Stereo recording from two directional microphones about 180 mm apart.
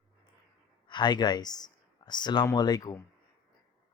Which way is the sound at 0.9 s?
25° left (ahead or behind).